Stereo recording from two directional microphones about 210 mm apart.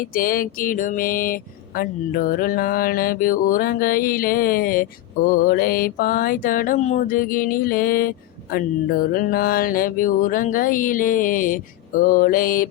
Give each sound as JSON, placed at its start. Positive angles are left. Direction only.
{"t": 0.0, "sound": "speech", "side_deg": 40}
{"t": 8.5, "sound": "mantra", "side_deg": 45}